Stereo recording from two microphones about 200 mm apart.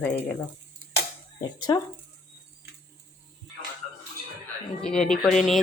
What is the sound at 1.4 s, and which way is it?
Speech, 20° left (ahead or behind).